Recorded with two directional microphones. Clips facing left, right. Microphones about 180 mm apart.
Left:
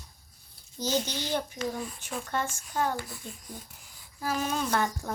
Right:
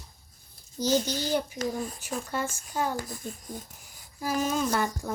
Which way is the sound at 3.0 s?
45° right (ahead or behind).